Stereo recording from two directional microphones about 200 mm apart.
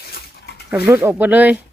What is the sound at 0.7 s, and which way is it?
Speech, 10° right (ahead or behind).